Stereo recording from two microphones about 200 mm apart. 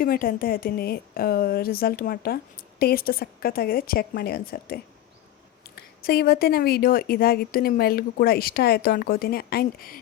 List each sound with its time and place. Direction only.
0.0 s a woman's voice: 45° left (ahead or behind)